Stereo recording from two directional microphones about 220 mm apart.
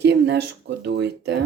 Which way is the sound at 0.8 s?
50° right (ahead or behind).